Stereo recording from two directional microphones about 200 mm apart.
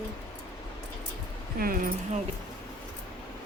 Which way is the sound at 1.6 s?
50° right (ahead or behind).